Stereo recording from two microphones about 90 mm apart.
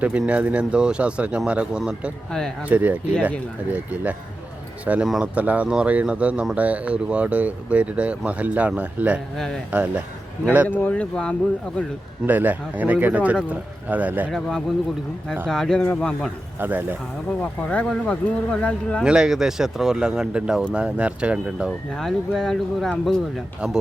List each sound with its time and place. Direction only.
0.0 s speech: 15° right (ahead or behind)
10.7 s speech: 15° left (ahead or behind)
12.2 s speech: 20° right (ahead or behind)
14.3 s speech: 5° left (ahead or behind)
15.8 s speech: 20° left (ahead or behind)
16.6 s speech: 20° right (ahead or behind)
17.4 s speech: 15° left (ahead or behind)
19.0 s speech: 10° right (ahead or behind)
21.9 s speech: 5° left (ahead or behind)